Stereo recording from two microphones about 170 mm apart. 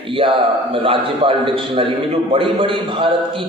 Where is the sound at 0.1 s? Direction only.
30° right (ahead or behind).